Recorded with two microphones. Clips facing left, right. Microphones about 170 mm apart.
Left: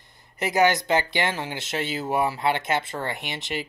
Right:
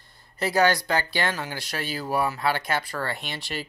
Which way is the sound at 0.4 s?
20° left (ahead or behind).